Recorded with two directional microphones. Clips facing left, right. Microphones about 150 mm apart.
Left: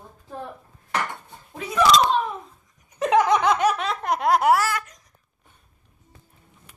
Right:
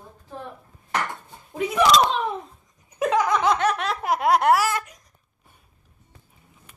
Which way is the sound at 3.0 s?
20° left (ahead or behind).